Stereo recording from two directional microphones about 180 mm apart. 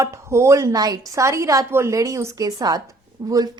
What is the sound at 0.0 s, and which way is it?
A woman's voice, 15° right (ahead or behind).